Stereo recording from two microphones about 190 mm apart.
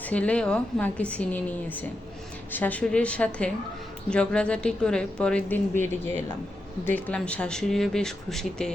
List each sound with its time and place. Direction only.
0.0 s a woman's voice: 5° left (ahead or behind)